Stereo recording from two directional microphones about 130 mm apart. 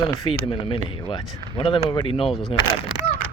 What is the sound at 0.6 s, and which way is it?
Speech, 40° left (ahead or behind).